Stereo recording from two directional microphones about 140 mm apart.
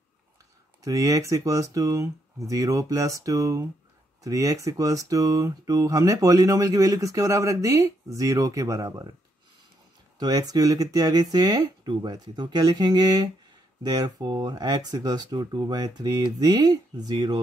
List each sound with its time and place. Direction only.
0.8 s speech: 25° right (ahead or behind)
10.1 s speech: 30° right (ahead or behind)